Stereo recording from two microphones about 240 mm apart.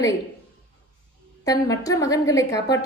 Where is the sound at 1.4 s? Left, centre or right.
Centre.